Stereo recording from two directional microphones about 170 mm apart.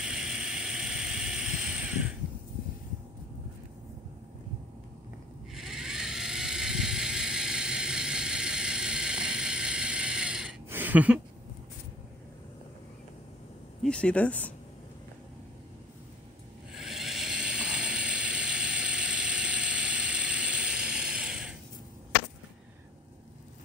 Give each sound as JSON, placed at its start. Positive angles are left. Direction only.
{"t": 0.0, "sound": "vehicle", "side_deg": -5}
{"t": 5.5, "sound": "a sound", "side_deg": 0}
{"t": 13.8, "sound": "speech", "side_deg": 5}
{"t": 16.7, "sound": "vehicle", "side_deg": 0}